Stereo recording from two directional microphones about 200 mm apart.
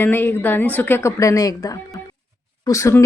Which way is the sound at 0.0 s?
10° left (ahead or behind).